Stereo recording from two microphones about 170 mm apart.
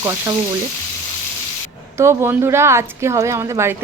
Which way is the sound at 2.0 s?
15° right (ahead or behind).